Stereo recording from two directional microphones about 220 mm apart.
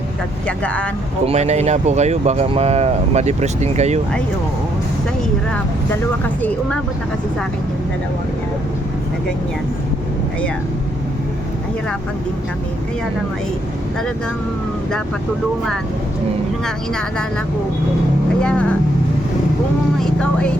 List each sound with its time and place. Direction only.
0.4 s speech: 5° left (ahead or behind)
1.2 s speech: 30° right (ahead or behind)
5.5 s speech: 10° left (ahead or behind)
16.6 s speech: 5° left (ahead or behind)
18.4 s speech: 5° left (ahead or behind)
20.0 s speech: 5° left (ahead or behind)